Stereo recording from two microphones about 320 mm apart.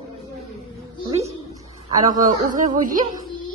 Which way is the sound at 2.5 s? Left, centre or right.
Right.